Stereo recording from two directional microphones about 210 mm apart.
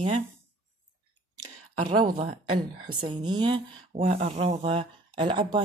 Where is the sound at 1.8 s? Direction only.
35° right (ahead or behind).